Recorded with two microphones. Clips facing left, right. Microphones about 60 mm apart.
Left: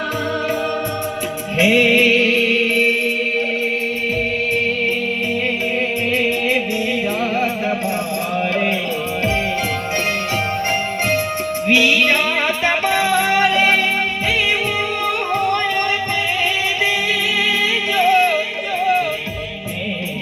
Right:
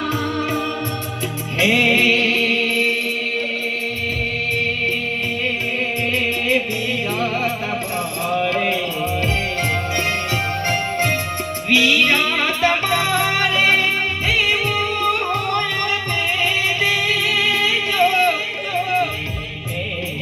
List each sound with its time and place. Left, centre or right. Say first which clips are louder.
1.5 s music: left 3 dB; centre
2.1 s music: left 3 dB; centre
11.7 s music: left 1 dB; left
12.5 s music: even; centre
15.3 s music: left 3 dB; left
17.3 s music: left 1 dB; centre